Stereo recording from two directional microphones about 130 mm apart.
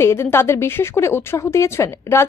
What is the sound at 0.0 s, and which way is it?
Speech, 20° left (ahead or behind).